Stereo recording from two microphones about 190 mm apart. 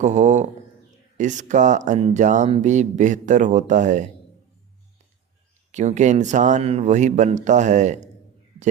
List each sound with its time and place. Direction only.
0.0 s speech: 40° right (ahead or behind)
5.7 s speech: 40° right (ahead or behind)